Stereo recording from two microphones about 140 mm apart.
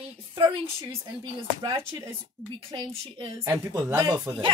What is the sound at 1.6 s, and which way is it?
Speech, 35° right (ahead or behind).